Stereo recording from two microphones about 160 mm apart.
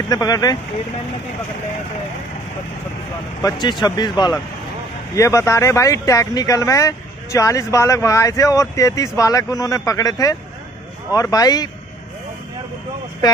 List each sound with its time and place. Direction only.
0.1 s speech: 25° left (ahead or behind)
3.8 s speech: 25° left (ahead or behind)